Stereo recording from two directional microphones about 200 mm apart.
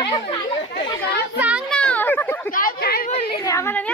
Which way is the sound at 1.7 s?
5° left (ahead or behind).